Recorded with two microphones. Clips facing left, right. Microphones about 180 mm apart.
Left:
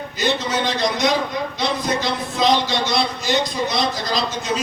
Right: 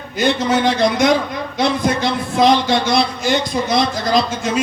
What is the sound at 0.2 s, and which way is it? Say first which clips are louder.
A man's voice: right 6 dB; 50° right (ahead or behind).